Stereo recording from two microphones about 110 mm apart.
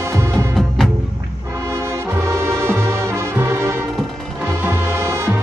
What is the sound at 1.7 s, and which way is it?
Music, 25° right (ahead or behind).